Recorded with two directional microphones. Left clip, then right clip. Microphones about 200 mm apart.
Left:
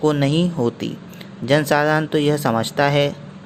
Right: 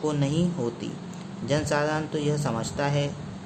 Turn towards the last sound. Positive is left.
turn(degrees=35)  # may be behind; listen again after turning